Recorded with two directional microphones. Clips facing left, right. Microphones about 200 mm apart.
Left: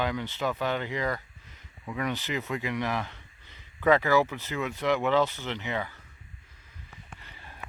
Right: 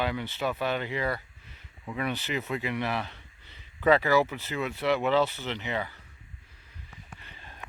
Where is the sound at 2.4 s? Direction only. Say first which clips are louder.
Even; 15° right (ahead or behind).